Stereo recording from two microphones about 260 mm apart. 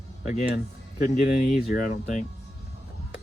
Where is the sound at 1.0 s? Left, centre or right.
Left.